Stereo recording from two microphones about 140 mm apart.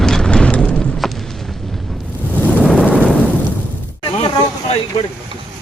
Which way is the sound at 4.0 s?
35° left (ahead or behind).